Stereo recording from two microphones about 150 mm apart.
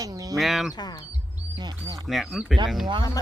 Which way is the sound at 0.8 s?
30° left (ahead or behind).